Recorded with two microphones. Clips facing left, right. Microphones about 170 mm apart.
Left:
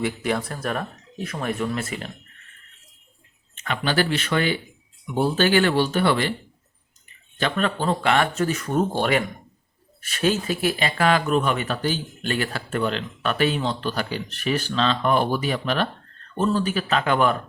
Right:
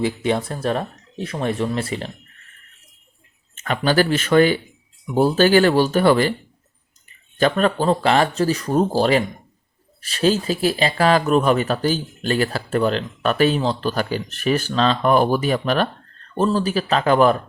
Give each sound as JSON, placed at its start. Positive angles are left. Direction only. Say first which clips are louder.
{"t": 0.0, "sound": "speech", "louder": "right 4 dB", "side_deg": -25}
{"t": 3.5, "sound": "speech", "louder": "right 5 dB", "side_deg": -40}
{"t": 7.3, "sound": "speech", "louder": "right 6 dB", "side_deg": -40}